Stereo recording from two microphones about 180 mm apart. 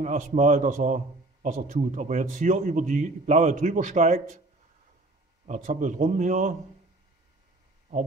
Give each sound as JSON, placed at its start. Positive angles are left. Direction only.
{"t": 0.0, "sound": "a man's voice", "side_deg": -45}
{"t": 5.5, "sound": "a man's voice", "side_deg": -45}